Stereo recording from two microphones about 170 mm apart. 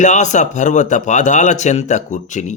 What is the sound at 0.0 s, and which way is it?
Speech, 45° left (ahead or behind).